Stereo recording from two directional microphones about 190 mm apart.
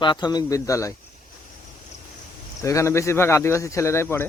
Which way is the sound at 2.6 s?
15° left (ahead or behind).